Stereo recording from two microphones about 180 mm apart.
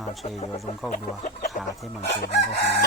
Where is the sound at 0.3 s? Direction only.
35° left (ahead or behind).